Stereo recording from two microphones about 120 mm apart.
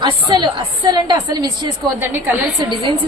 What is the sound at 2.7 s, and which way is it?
Speech, 40° right (ahead or behind).